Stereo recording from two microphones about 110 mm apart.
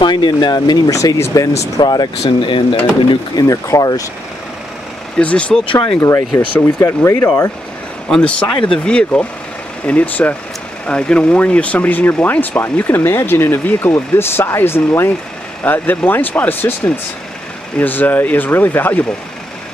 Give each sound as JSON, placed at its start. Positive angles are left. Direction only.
{"t": 0.0, "sound": "speech", "side_deg": 45}
{"t": 0.9, "sound": "speech", "side_deg": 25}
{"t": 1.8, "sound": "speech", "side_deg": 40}
{"t": 3.4, "sound": "speech", "side_deg": 30}
{"t": 5.1, "sound": "speech", "side_deg": 10}
{"t": 5.9, "sound": "speech", "side_deg": 30}
{"t": 8.1, "sound": "speech", "side_deg": 10}
{"t": 8.5, "sound": "speech", "side_deg": 50}
{"t": 8.8, "sound": "speech", "side_deg": 10}